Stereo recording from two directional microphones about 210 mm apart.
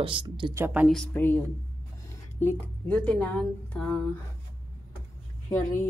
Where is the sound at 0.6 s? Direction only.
5° right (ahead or behind).